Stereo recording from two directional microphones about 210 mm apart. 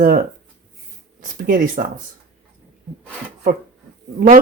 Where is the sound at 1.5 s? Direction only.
40° right (ahead or behind).